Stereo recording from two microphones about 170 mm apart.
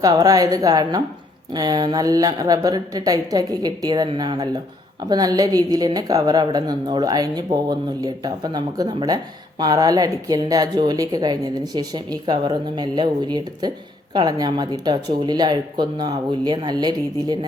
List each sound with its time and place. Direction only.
0.0 s a woman's voice: 20° right (ahead or behind)